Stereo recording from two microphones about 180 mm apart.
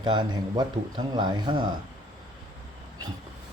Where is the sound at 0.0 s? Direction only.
25° right (ahead or behind).